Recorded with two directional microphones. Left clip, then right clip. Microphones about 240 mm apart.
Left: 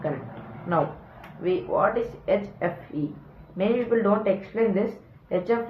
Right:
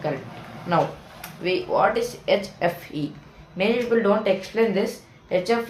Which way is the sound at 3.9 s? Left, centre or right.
Right.